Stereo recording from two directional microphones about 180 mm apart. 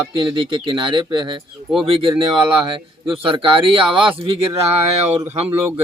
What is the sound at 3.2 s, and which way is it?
Speech, 30° right (ahead or behind).